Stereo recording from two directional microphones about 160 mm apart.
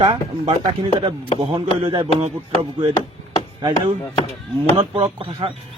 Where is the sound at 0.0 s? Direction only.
30° right (ahead or behind).